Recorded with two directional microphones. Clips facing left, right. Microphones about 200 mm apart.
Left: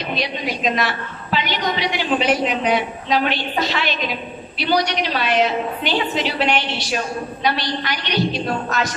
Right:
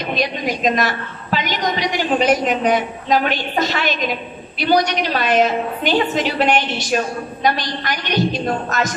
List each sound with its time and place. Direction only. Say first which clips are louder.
0.0 s a woman's voice: right 3 dB; 45° right (ahead or behind)